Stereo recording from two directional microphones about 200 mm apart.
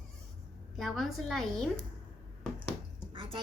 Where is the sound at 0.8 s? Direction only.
Centre (ahead or behind).